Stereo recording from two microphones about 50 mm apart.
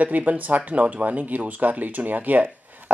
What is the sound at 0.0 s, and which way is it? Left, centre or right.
Speech, right.